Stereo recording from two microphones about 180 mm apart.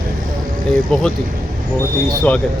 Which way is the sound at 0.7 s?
Centre (ahead or behind).